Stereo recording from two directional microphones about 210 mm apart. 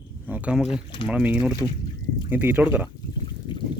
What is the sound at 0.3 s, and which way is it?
Speech, 5° right (ahead or behind).